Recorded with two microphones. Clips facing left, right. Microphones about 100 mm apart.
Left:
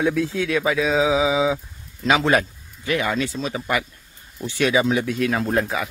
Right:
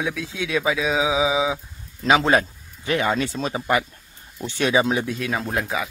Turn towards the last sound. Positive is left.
turn(degrees=-5)  # may be behind; listen again after turning